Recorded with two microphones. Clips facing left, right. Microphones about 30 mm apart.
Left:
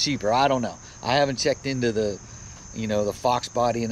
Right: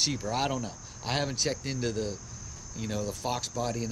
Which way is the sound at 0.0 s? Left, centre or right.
Left.